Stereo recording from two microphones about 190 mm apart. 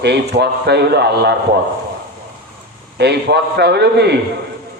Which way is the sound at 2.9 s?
60° right (ahead or behind).